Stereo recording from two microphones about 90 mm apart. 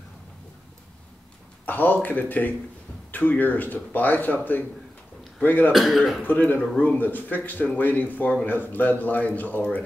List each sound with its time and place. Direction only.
1.7 s a man's voice: 20° left (ahead or behind)
5.4 s a man's voice: 20° left (ahead or behind)
5.7 s speech: centre (ahead or behind)
6.2 s a man's voice: 20° left (ahead or behind)